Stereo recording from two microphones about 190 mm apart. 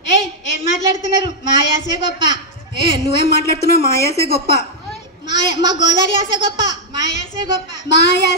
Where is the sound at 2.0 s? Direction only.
70° left (ahead or behind).